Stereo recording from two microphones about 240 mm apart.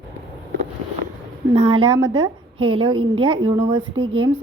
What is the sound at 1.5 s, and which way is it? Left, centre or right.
A woman's voice, right.